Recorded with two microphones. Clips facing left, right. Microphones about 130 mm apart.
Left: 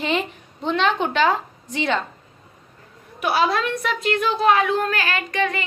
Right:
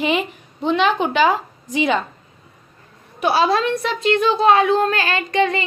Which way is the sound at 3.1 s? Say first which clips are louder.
Right 3 dB; 30° right (ahead or behind).